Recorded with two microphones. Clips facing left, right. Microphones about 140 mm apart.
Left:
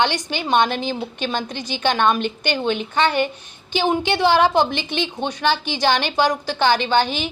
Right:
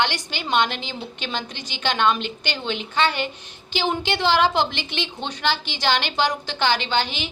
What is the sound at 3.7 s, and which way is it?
A woman's voice, 15° left (ahead or behind).